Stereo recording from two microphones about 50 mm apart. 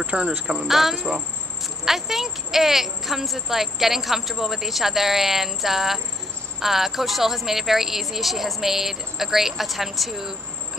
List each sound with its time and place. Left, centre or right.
0.0 s speech: right
0.7 s speech: centre